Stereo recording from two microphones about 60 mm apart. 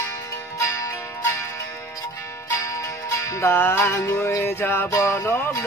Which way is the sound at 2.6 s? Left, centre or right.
Left.